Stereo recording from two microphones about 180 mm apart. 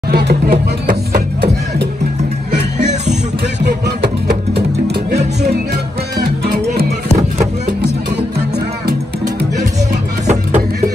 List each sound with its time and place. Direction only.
0.1 s music: 60° right (ahead or behind)
2.5 s music: 40° right (ahead or behind)
3.6 s music: 65° right (ahead or behind)
10.2 s music: 40° right (ahead or behind)